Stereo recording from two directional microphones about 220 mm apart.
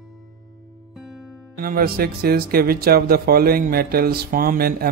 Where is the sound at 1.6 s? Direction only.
40° right (ahead or behind).